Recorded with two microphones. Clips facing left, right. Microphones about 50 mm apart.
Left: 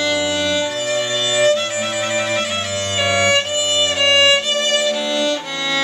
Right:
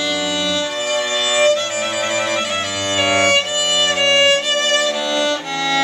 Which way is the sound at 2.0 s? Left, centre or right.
Centre.